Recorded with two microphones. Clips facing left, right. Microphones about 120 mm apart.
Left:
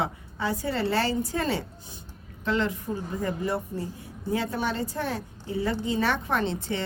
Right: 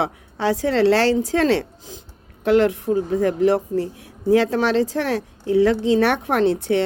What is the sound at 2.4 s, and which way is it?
A woman's voice, 70° right (ahead or behind).